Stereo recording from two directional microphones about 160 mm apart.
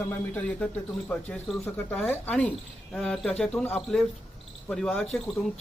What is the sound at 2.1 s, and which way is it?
Speech, 10° left (ahead or behind).